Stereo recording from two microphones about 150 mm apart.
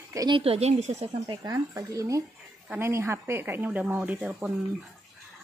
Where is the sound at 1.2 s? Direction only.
25° right (ahead or behind).